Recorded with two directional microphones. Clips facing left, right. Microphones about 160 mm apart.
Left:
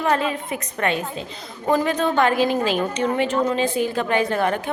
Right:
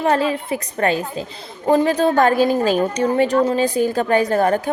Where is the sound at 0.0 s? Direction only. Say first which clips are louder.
Right 3 dB; 30° right (ahead or behind).